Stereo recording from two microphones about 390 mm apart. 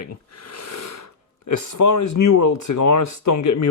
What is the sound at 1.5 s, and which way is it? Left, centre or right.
Speech, left.